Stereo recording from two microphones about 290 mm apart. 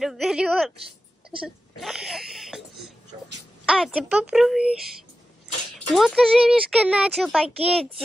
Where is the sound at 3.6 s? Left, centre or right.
Centre.